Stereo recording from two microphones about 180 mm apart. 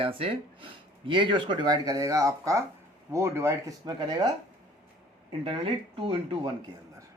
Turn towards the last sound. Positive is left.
turn(degrees=-30)  # may be behind; listen again after turning